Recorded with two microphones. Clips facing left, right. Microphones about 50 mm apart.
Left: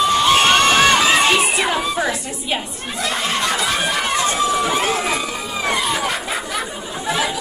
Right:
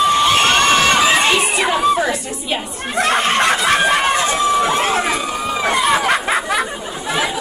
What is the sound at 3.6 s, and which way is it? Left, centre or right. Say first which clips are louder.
Chicken: right 6 dB; right.